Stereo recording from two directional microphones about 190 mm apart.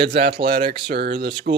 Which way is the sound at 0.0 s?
60° right (ahead or behind).